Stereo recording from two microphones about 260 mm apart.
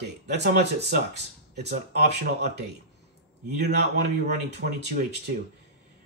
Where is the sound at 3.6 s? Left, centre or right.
Right.